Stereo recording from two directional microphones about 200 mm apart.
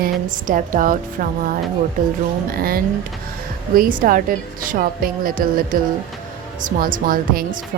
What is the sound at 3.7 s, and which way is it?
A woman's voice, 45° right (ahead or behind).